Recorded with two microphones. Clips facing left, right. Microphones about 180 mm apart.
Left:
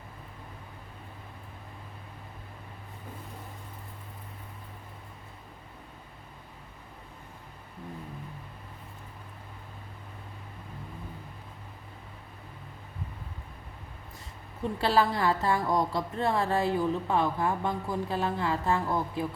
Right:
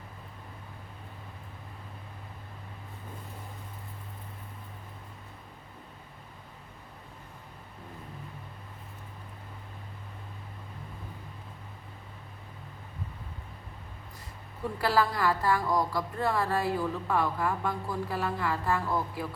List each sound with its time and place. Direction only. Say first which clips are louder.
14.8 s speech: left 1 dB; 25° left (ahead or behind)